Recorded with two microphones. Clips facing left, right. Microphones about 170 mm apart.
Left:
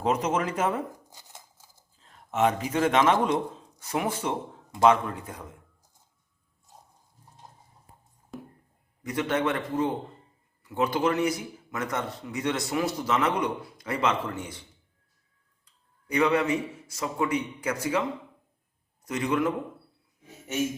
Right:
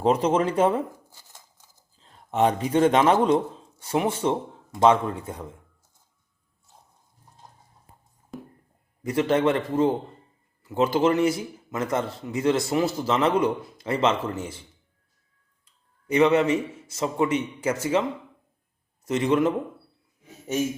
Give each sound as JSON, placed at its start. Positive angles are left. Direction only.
{"t": 0.0, "sound": "speech", "side_deg": -30}
{"t": 0.9, "sound": "a sound", "side_deg": 10}
{"t": 2.0, "sound": "a man's voice", "side_deg": -30}
{"t": 8.3, "sound": "a sound", "side_deg": 0}
{"t": 9.0, "sound": "a man's voice", "side_deg": -30}
{"t": 16.0, "sound": "a man's voice", "side_deg": -25}
{"t": 19.0, "sound": "a man's voice", "side_deg": -25}